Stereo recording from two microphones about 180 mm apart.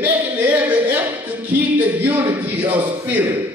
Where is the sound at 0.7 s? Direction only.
25° right (ahead or behind).